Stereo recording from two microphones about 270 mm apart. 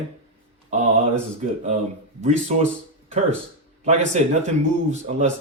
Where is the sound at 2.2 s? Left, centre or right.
Right.